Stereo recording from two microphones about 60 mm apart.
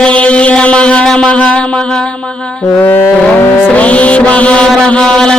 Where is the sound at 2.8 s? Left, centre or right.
Left.